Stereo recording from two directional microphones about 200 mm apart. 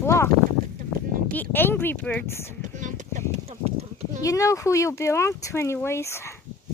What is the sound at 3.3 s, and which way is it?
Clip-clop, 30° right (ahead or behind).